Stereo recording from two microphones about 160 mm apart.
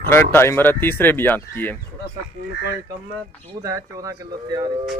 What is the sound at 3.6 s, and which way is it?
Speech, 20° right (ahead or behind).